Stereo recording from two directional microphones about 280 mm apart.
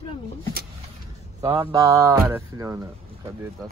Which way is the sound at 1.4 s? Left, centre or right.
Centre.